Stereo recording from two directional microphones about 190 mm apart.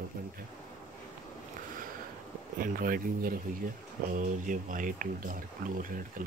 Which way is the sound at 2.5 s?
45° right (ahead or behind).